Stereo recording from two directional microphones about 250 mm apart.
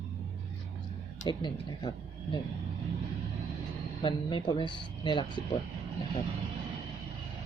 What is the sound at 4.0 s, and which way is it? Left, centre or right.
Speech, centre.